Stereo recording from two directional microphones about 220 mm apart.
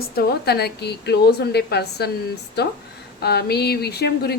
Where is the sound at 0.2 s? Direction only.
45° left (ahead or behind).